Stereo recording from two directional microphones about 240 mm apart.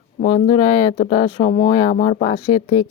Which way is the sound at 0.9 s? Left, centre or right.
Left.